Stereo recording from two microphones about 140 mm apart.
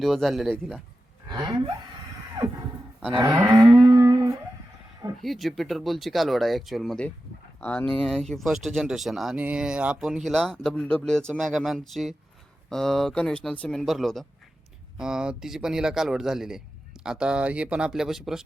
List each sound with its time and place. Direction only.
0.0 s speech: centre (ahead or behind)
1.3 s a sound: 30° right (ahead or behind)
2.4 s neigh: 30° right (ahead or behind)
3.8 s guitar: 25° right (ahead or behind)
5.2 s speech: centre (ahead or behind)